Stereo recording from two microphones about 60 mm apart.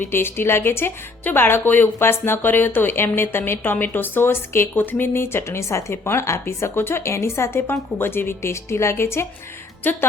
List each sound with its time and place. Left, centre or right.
0.1 s a woman's voice: left